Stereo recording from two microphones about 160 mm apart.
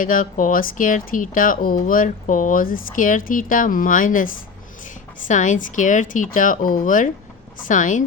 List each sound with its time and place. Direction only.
0.0 s speech: 55° left (ahead or behind)